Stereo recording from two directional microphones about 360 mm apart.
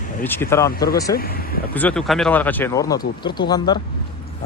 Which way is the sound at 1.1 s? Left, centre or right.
Left.